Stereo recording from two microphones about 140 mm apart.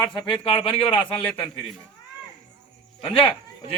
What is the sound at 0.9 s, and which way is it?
Speech, 10° left (ahead or behind).